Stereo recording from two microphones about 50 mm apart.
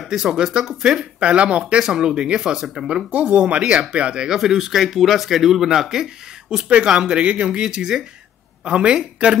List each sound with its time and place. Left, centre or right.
0.0 s speech: centre
1.2 s speech: right
3.1 s speech: right
4.3 s speech: centre
6.7 s speech: right